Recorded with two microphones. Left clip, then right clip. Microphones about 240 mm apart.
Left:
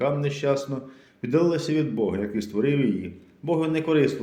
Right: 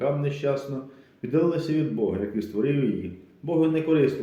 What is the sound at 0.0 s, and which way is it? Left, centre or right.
Speech, left.